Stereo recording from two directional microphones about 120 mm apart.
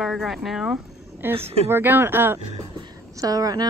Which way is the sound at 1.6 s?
20° right (ahead or behind).